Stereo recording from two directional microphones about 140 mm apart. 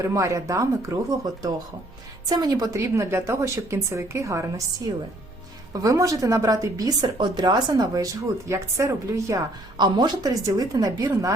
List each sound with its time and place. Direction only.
0.0 s a woman's voice: 20° right (ahead or behind)
5.7 s a woman's voice: 25° right (ahead or behind)